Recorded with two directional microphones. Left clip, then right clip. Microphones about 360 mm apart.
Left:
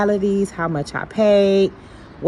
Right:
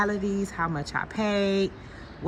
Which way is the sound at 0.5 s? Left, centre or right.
Left.